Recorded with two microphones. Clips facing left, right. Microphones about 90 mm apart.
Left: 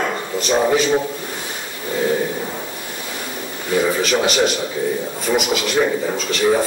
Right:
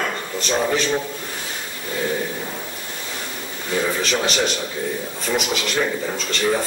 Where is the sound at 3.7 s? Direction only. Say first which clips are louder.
Left 4 dB; 10° left (ahead or behind).